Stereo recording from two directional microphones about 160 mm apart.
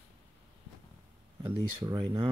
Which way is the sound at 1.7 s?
25° right (ahead or behind).